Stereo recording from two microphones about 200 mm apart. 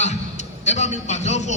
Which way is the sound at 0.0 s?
35° left (ahead or behind).